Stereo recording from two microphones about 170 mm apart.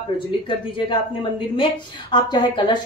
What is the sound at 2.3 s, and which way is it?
Speech, 25° left (ahead or behind).